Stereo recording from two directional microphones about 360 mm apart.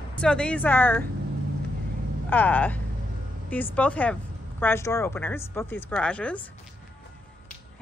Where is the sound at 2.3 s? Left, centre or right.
Centre.